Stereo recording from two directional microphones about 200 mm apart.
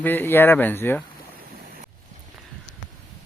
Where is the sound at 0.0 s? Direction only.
10° left (ahead or behind).